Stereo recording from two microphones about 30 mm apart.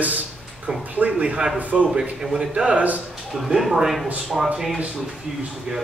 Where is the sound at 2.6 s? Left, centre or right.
Right.